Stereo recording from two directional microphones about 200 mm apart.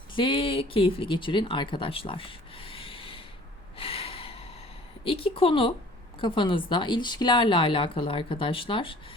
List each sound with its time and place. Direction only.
0.1 s speech: 25° left (ahead or behind)
3.8 s snort: 30° left (ahead or behind)
5.0 s speech: 25° left (ahead or behind)